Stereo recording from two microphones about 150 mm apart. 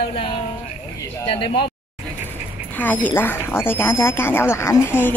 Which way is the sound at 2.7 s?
10° left (ahead or behind).